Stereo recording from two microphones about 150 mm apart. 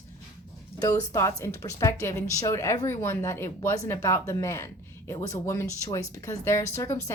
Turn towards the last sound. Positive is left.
turn(degrees=20)  # may be behind; listen again after turning